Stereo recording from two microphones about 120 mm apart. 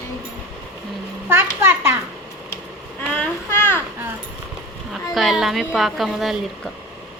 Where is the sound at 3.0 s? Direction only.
15° left (ahead or behind).